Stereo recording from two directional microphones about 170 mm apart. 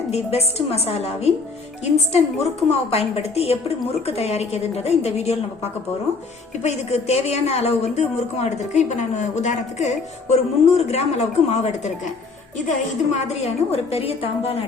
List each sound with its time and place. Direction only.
0.1 s a woman's voice: 35° left (ahead or behind)
6.6 s a woman's voice: 40° left (ahead or behind)
13.1 s a woman's voice: 40° left (ahead or behind)